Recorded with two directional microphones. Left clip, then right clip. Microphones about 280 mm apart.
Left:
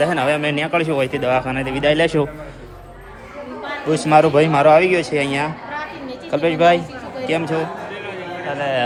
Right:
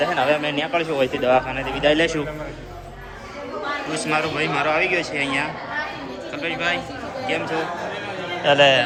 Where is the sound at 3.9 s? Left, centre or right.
Centre.